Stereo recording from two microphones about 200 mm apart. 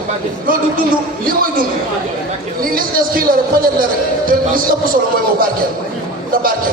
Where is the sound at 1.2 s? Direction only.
45° right (ahead or behind).